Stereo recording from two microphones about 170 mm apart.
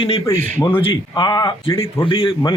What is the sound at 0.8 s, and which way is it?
A man's voice, 30° left (ahead or behind).